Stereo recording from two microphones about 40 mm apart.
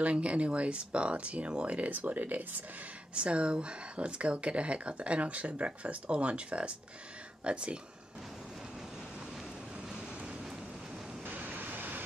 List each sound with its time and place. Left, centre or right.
0.0 s speech: right
1.8 s speech: right
3.2 s speech: right
11.3 s waves: right